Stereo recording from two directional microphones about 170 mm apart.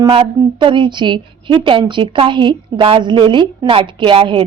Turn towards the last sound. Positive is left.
turn(degrees=-30)  # may be behind; listen again after turning